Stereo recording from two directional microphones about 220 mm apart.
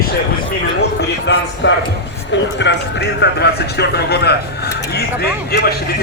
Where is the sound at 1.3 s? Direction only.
55° left (ahead or behind).